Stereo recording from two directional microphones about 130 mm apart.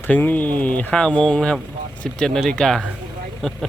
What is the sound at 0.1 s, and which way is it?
Speech, 15° left (ahead or behind).